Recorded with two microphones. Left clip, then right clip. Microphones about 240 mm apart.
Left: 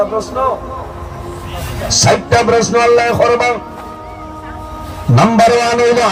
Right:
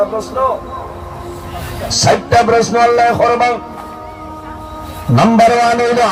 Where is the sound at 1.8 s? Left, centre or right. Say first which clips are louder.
Left 1 dB; left.